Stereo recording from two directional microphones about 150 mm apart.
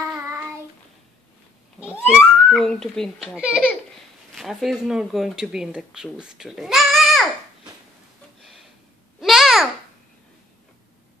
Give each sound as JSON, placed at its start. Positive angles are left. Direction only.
{"t": 0.1, "sound": "child singing", "side_deg": -20}
{"t": 1.8, "sound": "a child's voice", "side_deg": -10}
{"t": 9.2, "sound": "babbling", "side_deg": 0}